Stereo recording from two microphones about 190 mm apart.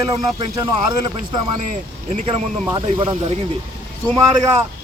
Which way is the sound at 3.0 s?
30° right (ahead or behind).